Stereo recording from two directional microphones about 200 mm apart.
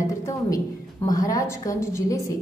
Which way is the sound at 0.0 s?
15° left (ahead or behind).